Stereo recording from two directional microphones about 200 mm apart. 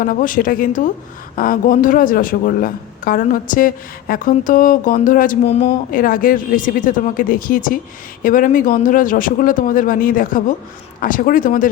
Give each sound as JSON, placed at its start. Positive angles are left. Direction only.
{"t": 0.0, "sound": "a man's voice", "side_deg": 45}